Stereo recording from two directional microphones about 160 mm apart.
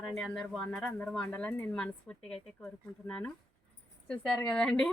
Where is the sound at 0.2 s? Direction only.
5° left (ahead or behind).